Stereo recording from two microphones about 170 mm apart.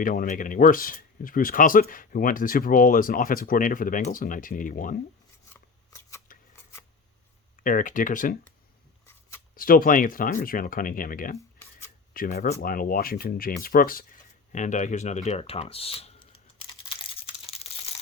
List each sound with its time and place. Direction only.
0.0 s speech: 50° left (ahead or behind)
5.9 s scissors: 15° left (ahead or behind)
7.6 s speech: 50° left (ahead or behind)
9.6 s speech: 55° left (ahead or behind)
11.3 s a sound: 15° left (ahead or behind)
12.1 s speech: 60° left (ahead or behind); by 16.4 s 35° left (ahead or behind)
17.0 s a sound: 35° left (ahead or behind)